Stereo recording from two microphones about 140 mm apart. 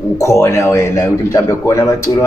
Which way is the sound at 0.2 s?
20° left (ahead or behind).